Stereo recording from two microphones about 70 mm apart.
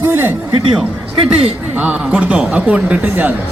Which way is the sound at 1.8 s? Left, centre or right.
Centre.